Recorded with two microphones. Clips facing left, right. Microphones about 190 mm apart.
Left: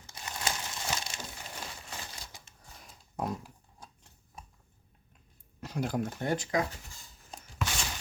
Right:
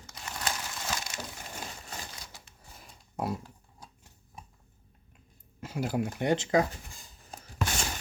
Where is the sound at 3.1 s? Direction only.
10° right (ahead or behind).